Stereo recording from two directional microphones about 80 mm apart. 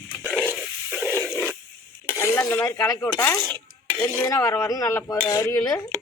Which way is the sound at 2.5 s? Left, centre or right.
Left.